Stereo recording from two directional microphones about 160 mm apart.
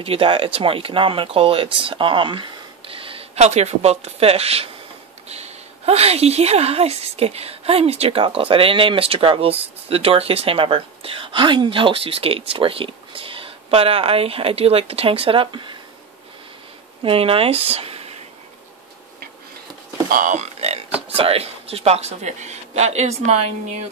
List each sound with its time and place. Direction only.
0.0 s a woman's voice: 35° right (ahead or behind)
17.0 s a woman's voice: 35° right (ahead or behind)
17.6 s a sound: 40° right (ahead or behind)
20.1 s speech: 55° right (ahead or behind)